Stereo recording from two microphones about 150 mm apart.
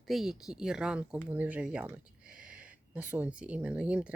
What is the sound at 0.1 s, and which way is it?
Speech, centre (ahead or behind).